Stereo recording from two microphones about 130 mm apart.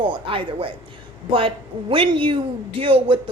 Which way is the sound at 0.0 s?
40° right (ahead or behind).